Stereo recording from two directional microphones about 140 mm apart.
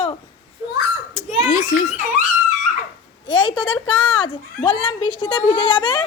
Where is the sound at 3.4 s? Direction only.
35° left (ahead or behind).